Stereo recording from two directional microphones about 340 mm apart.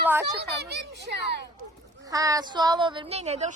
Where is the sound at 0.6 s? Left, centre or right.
Right.